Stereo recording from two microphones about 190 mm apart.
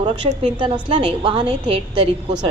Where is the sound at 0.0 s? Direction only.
30° right (ahead or behind).